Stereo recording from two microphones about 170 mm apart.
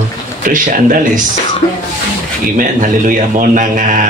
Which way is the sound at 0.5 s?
50° right (ahead or behind).